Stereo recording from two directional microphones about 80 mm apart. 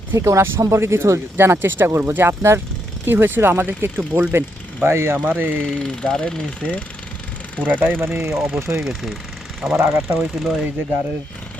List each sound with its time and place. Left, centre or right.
0.1 s speech: right
5.6 s speech: centre
7.6 s speech: centre
8.4 s speech: centre
9.7 s speech: right
10.2 s pulleys: centre